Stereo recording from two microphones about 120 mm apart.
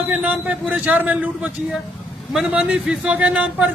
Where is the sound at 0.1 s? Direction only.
10° right (ahead or behind).